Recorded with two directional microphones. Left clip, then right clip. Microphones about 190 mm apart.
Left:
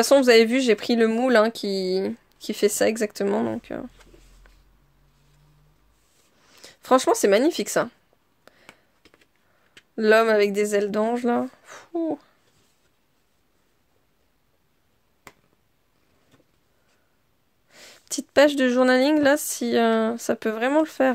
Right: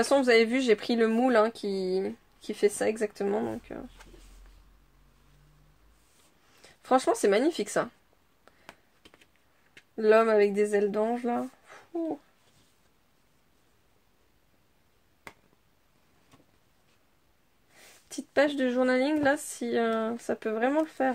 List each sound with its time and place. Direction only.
0.0 s speech: 35° left (ahead or behind)
6.5 s speech: 40° left (ahead or behind)
8.5 s a sound: 35° left (ahead or behind)
9.9 s speech: 40° left (ahead or behind)
17.7 s speech: 45° left (ahead or behind)